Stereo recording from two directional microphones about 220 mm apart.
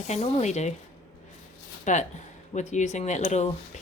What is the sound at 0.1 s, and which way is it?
Speech, 30° left (ahead or behind).